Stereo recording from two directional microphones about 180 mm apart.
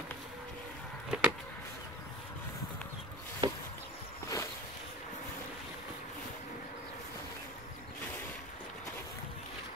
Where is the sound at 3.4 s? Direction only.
25° right (ahead or behind).